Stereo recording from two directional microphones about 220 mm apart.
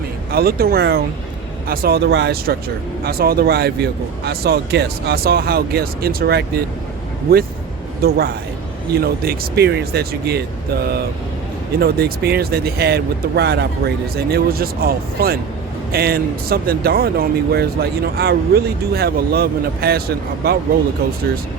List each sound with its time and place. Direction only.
0.3 s speech: 45° right (ahead or behind)
8.0 s speech: 45° right (ahead or behind)
11.8 s speech: 45° right (ahead or behind)